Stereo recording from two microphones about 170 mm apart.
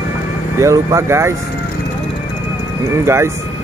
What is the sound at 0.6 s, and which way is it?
Speech, 20° right (ahead or behind).